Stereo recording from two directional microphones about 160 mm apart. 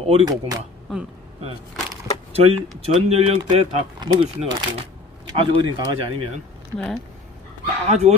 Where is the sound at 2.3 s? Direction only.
40° right (ahead or behind).